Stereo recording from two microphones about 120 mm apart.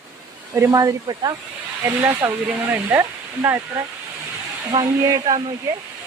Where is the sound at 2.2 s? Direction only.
15° right (ahead or behind).